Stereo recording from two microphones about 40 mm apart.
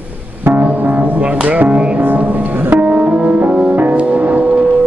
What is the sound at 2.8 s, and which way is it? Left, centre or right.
Music, right.